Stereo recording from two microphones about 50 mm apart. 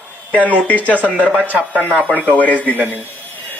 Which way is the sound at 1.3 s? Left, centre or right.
Right.